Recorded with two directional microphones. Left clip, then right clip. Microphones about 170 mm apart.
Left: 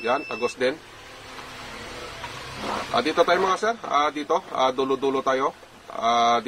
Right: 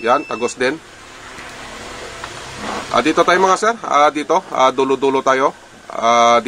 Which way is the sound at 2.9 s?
25° right (ahead or behind).